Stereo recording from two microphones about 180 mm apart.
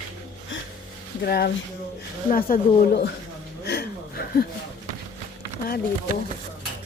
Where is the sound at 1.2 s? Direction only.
60° left (ahead or behind).